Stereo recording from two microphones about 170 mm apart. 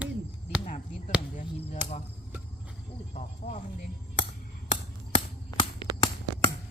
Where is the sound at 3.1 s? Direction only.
45° left (ahead or behind).